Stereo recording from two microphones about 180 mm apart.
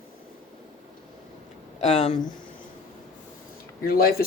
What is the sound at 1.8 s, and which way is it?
Speech, 40° left (ahead or behind).